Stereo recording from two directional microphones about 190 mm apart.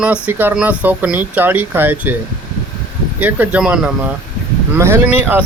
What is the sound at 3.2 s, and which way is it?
Speech, 10° right (ahead or behind).